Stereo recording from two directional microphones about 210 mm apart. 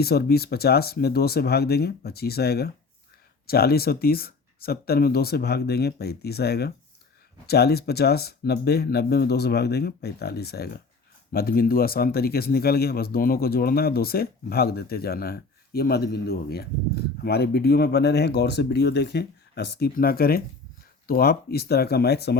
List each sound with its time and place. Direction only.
0.0 s speech: 50° left (ahead or behind)